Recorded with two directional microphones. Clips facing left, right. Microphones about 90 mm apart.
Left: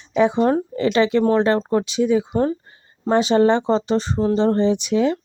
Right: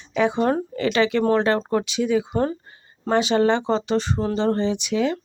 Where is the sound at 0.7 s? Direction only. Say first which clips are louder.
Left 3 dB; 25° left (ahead or behind).